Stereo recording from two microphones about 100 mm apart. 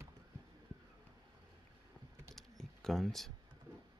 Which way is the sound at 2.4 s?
5° left (ahead or behind).